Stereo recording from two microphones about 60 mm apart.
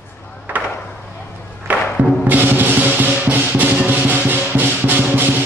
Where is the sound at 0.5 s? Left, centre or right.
Right.